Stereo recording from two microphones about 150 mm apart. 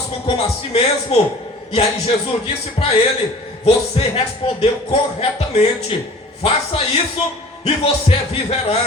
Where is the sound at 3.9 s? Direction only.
40° left (ahead or behind).